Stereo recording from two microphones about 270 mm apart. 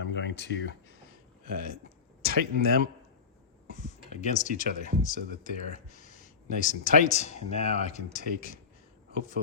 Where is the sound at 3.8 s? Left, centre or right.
Left.